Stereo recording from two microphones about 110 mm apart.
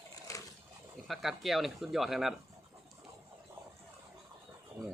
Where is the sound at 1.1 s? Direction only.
Centre (ahead or behind).